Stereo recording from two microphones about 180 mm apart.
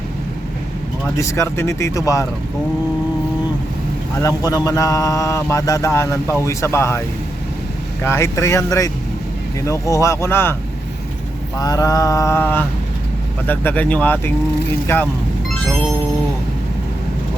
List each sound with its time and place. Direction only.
1.1 s speech: 15° left (ahead or behind)
4.2 s speech: 20° left (ahead or behind)
8.0 s speech: 15° left (ahead or behind)
11.5 s mantra: 20° left (ahead or behind)
13.5 s speech: 10° left (ahead or behind)